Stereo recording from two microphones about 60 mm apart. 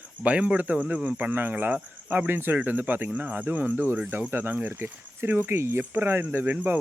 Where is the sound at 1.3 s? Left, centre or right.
Right.